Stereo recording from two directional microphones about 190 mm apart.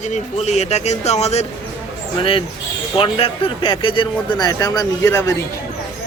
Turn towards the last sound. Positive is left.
turn(degrees=20)  # may be behind; listen again after turning